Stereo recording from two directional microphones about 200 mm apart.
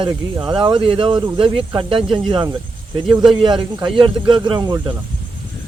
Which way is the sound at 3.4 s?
25° right (ahead or behind).